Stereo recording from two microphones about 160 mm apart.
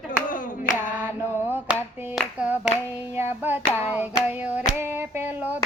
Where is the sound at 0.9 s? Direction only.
10° right (ahead or behind).